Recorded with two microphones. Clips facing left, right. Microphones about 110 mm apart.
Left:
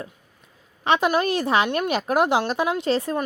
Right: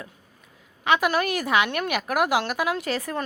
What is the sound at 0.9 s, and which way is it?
A woman's voice, 30° left (ahead or behind).